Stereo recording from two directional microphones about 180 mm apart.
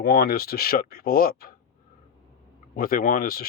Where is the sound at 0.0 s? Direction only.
60° left (ahead or behind).